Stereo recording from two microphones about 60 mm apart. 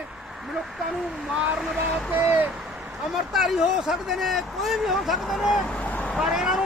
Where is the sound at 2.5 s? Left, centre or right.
Centre.